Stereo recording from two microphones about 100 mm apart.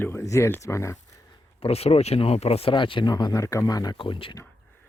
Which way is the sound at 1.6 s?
90° left.